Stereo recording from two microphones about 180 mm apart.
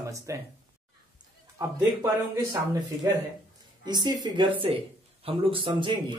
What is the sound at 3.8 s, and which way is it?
Speech, 25° right (ahead or behind).